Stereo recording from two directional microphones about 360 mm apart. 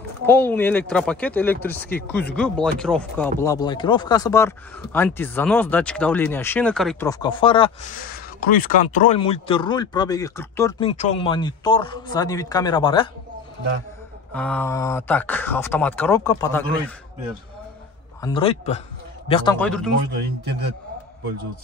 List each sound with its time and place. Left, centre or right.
0.3 s speech: centre
14.3 s speech: centre
18.2 s speech: centre